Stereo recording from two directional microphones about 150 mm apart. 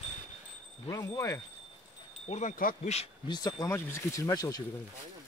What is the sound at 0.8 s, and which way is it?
Speech, 20° left (ahead or behind).